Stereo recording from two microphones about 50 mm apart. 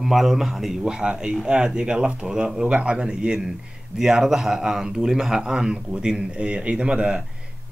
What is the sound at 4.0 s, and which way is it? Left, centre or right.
Speech, centre.